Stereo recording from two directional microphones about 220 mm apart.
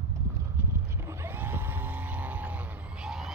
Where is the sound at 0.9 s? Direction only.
10° right (ahead or behind).